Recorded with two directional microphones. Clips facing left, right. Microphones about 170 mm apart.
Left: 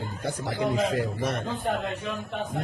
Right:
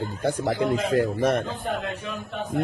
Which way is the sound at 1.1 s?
50° right (ahead or behind).